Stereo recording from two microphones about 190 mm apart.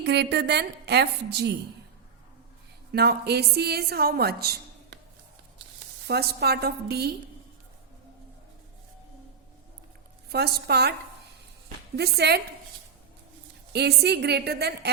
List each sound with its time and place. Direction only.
0.0 s a woman's voice: 60° right (ahead or behind)
2.9 s a woman's voice: 55° right (ahead or behind)
6.1 s a woman's voice: 55° right (ahead or behind)
10.2 s a woman's voice: 55° right (ahead or behind)
11.9 s a woman's voice: 60° right (ahead or behind)
13.7 s a woman's voice: 60° right (ahead or behind)